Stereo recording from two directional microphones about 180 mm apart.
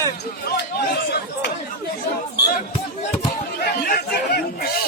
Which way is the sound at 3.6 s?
60° left (ahead or behind).